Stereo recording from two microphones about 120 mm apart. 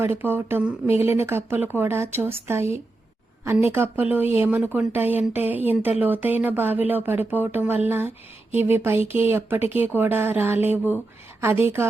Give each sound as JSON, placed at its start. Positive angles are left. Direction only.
{"t": 0.0, "sound": "speech", "side_deg": -20}